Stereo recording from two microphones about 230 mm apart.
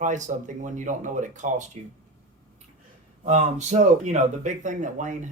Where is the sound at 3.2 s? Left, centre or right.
Right.